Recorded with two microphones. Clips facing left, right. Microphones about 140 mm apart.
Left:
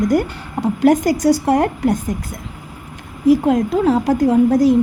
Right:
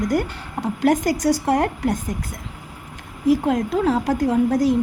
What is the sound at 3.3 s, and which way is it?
A woman's voice, 10° left (ahead or behind).